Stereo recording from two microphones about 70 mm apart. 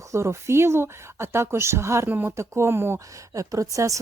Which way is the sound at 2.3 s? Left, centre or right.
Right.